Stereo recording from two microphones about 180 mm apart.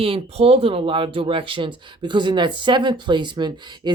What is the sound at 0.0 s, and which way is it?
Speech, 30° right (ahead or behind).